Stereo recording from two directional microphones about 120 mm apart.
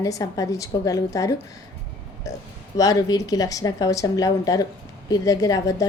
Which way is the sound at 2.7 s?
30° left (ahead or behind).